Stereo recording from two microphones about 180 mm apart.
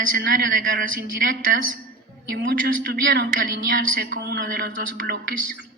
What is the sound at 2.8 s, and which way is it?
A man's voice, 65° right (ahead or behind).